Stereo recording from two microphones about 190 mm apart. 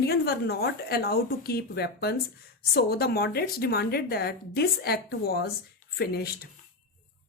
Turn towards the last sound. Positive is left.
turn(degrees=55)  # may be behind; listen again after turning